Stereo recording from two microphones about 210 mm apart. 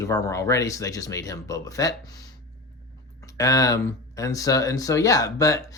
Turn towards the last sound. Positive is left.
turn(degrees=15)  # may be behind; listen again after turning